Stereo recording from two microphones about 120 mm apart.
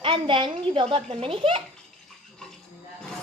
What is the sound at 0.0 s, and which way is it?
A child's voice, 45° right (ahead or behind).